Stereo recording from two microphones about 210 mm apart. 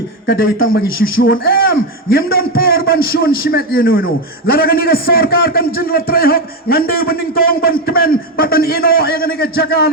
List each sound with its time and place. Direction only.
0.3 s a man's voice: 50° left (ahead or behind)